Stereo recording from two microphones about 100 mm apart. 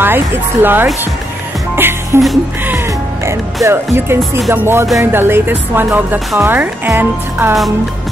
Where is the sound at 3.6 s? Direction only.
25° right (ahead or behind).